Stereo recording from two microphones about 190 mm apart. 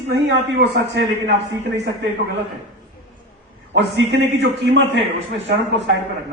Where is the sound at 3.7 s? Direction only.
70° right (ahead or behind).